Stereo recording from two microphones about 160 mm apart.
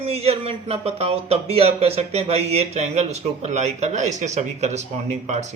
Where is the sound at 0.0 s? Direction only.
40° right (ahead or behind).